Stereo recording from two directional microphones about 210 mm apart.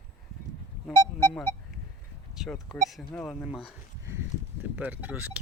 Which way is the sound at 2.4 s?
Centre (ahead or behind).